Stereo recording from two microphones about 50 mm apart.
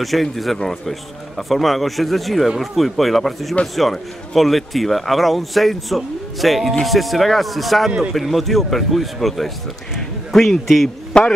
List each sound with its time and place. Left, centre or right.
0.0 s a man's voice: centre
11.1 s a man's voice: left